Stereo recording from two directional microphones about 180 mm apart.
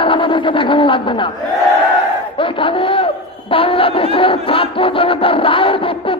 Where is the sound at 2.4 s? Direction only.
30° left (ahead or behind).